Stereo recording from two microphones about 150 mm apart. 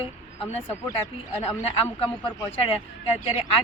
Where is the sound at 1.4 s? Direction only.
40° left (ahead or behind).